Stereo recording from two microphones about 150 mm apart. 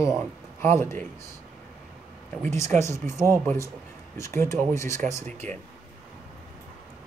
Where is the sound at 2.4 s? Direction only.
20° left (ahead or behind).